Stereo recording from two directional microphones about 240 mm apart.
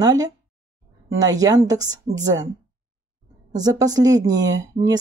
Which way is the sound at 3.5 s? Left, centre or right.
Centre.